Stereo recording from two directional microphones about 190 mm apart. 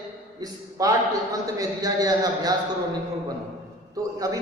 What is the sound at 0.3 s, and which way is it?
A man's voice, 20° right (ahead or behind).